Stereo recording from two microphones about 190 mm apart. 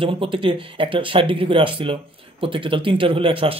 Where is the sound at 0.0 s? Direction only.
30° right (ahead or behind).